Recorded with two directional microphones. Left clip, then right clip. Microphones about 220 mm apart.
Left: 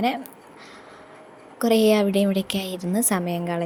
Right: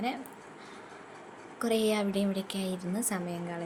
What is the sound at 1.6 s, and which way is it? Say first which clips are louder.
A woman's voice: left 10 dB; 25° left (ahead or behind).